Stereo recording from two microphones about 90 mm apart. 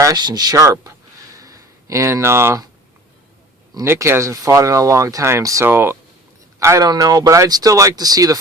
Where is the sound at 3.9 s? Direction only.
30° right (ahead or behind).